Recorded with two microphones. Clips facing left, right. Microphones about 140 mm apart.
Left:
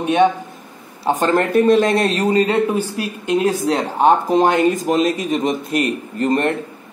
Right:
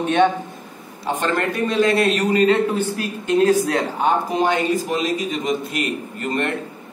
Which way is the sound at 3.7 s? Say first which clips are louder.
Left 4 dB; 30° left (ahead or behind).